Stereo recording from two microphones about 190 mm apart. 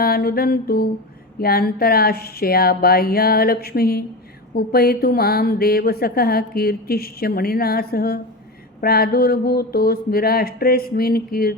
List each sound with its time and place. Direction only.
0.0 s speech: 55° left (ahead or behind)